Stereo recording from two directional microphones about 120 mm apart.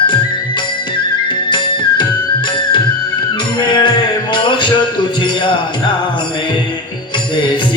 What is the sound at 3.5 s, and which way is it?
Music, 40° left (ahead or behind).